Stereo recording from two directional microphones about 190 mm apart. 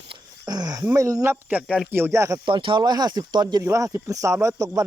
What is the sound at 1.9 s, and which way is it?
Speech, 15° right (ahead or behind).